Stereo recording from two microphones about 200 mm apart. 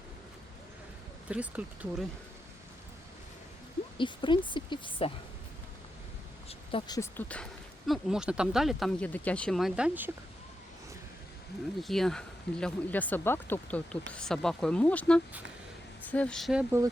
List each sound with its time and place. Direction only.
1.3 s speech: 5° right (ahead or behind)
3.9 s speech: 25° left (ahead or behind)
6.5 s speech: 25° left (ahead or behind); by 7.4 s 10° left (ahead or behind)
7.9 s speech: 5° right (ahead or behind)
11.8 s speech: centre (ahead or behind)